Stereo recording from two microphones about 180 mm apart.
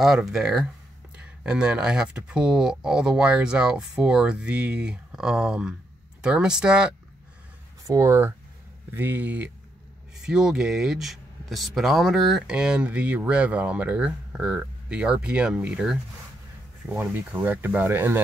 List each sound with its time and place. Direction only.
0.0 s speech: centre (ahead or behind)
7.8 s speech: 20° right (ahead or behind)